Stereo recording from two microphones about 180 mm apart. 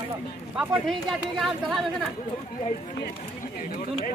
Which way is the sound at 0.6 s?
Centre (ahead or behind).